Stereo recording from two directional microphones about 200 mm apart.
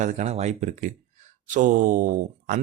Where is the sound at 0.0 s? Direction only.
35° right (ahead or behind).